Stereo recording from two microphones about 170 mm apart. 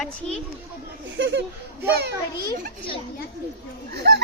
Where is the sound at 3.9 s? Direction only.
75° right (ahead or behind).